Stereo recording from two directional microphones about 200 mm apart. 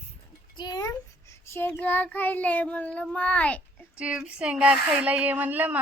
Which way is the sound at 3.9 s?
5° right (ahead or behind).